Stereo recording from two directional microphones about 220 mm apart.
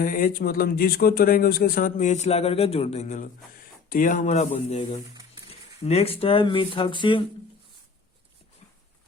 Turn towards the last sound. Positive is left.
turn(degrees=20)  # may be behind; listen again after turning